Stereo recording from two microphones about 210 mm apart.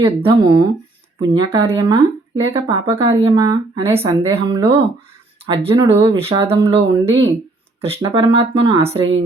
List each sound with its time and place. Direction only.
0.0 s speech: 25° right (ahead or behind)